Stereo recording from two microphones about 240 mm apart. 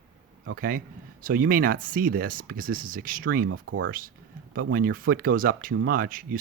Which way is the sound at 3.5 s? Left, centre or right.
Right.